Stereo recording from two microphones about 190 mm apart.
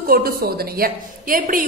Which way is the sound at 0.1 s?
50° right (ahead or behind).